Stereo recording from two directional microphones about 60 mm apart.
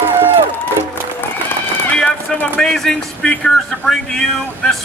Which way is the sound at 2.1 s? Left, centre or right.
Left.